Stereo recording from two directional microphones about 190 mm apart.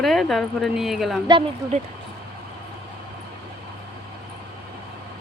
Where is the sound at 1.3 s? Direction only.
30° right (ahead or behind).